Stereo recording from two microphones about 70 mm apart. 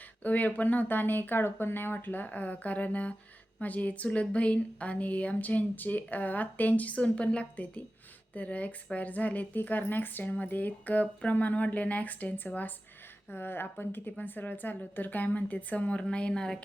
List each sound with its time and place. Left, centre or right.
0.2 s speech: left